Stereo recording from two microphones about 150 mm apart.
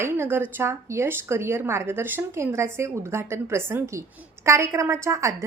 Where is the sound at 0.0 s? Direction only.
15° right (ahead or behind).